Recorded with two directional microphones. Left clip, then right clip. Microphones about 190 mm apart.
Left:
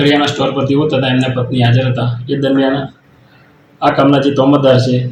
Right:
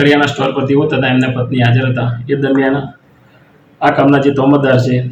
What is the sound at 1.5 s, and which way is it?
Speech, 30° right (ahead or behind).